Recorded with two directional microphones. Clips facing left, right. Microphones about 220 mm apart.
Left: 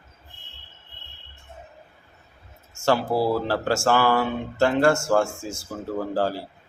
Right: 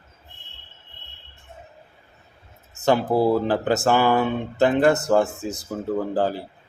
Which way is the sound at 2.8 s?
20° right (ahead or behind).